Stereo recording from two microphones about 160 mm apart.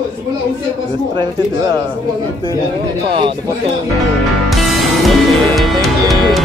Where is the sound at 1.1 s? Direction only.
30° right (ahead or behind).